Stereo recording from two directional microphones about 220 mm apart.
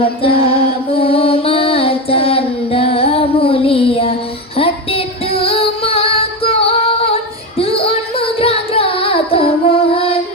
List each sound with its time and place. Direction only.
0.0 s music: 25° left (ahead or behind)
4.5 s female singing: 25° left (ahead or behind)
7.6 s music: 25° left (ahead or behind)